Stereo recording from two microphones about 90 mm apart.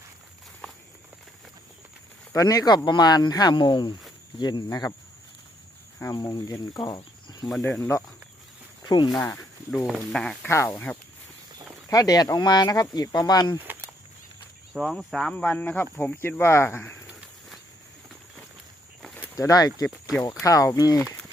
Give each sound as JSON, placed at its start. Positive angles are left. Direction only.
{"t": 2.3, "sound": "speech", "side_deg": 40}
{"t": 6.1, "sound": "speech", "side_deg": 45}
{"t": 7.6, "sound": "speech", "side_deg": 25}
{"t": 8.8, "sound": "cricket", "side_deg": 55}
{"t": 9.1, "sound": "speech", "side_deg": 30}
{"t": 9.7, "sound": "speech", "side_deg": -5}
{"t": 10.1, "sound": "speech", "side_deg": 10}
{"t": 10.5, "sound": "speech", "side_deg": 30}
{"t": 11.9, "sound": "speech", "side_deg": 45}
{"t": 14.7, "sound": "speech", "side_deg": 0}
{"t": 19.4, "sound": "speech", "side_deg": 40}